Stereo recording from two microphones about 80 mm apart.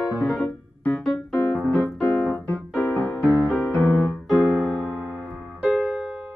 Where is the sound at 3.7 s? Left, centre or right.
Left.